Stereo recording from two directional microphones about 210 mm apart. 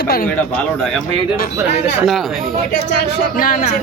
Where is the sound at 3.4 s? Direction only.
40° left (ahead or behind).